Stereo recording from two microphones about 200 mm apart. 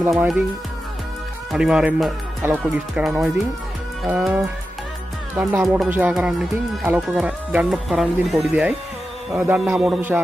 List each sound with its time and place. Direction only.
0.0 s a man's voice: 15° right (ahead or behind)
1.5 s a man's voice: 5° right (ahead or behind)